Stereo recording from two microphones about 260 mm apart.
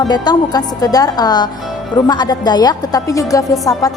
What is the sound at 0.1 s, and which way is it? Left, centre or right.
A woman's voice, centre.